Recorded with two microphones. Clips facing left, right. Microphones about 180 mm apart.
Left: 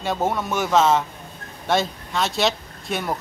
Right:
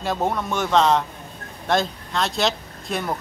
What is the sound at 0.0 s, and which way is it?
Speech, centre (ahead or behind).